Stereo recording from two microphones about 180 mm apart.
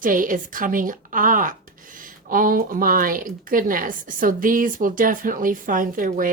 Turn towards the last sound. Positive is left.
turn(degrees=-50)  # may be behind; listen again after turning